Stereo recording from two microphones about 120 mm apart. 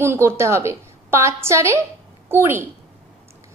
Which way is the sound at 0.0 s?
20° right (ahead or behind).